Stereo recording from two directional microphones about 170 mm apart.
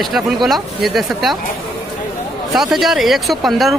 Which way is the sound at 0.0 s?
Centre (ahead or behind).